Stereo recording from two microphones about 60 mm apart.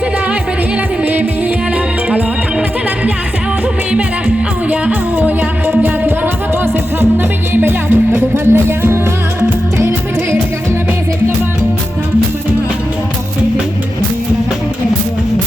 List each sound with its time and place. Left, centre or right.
1.0 s music: right
4.7 s music: right